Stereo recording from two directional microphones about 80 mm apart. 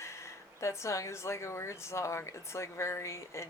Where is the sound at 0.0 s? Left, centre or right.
Left.